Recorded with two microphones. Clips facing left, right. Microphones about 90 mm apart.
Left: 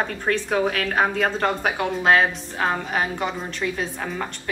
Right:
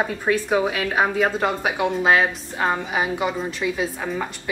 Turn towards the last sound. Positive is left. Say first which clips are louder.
# right 2 dB
turn(degrees=-5)  # may be behind; listen again after turning